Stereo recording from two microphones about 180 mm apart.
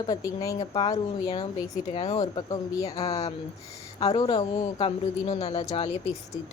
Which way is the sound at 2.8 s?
35° left (ahead or behind).